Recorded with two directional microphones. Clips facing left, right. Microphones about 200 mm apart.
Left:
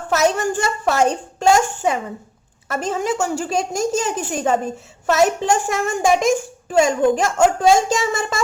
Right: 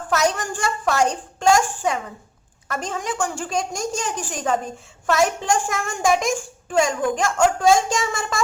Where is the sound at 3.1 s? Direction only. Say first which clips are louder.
Left 4 dB; 25° left (ahead or behind).